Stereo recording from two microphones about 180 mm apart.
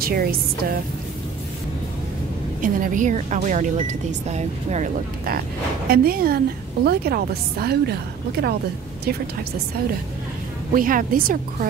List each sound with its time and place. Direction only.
0.0 s a woman's voice: 55° right (ahead or behind)
2.6 s speech: 45° right (ahead or behind)
5.9 s a woman's voice: 55° right (ahead or behind)
10.7 s a woman's voice: 50° right (ahead or behind)